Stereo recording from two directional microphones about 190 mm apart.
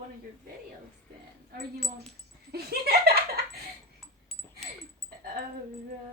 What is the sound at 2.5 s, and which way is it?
Laughter, 55° right (ahead or behind).